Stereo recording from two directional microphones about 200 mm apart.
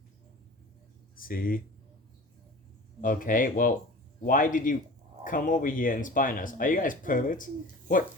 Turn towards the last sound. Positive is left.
turn(degrees=40)  # may be behind; listen again after turning